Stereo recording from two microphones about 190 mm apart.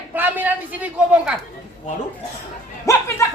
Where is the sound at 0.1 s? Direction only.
10° right (ahead or behind).